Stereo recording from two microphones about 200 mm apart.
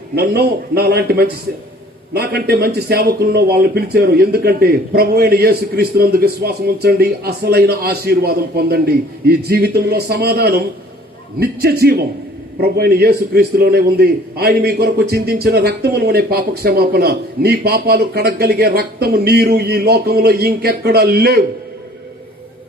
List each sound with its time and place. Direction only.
0.2 s a man's voice: 50° right (ahead or behind)